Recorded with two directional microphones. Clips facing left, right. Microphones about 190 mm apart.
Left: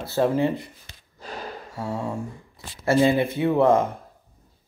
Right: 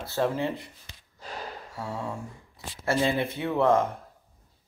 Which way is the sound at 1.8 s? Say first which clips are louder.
Left 5 dB; 20° left (ahead or behind).